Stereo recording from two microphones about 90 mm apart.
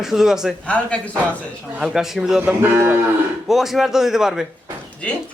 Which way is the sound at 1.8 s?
5° right (ahead or behind).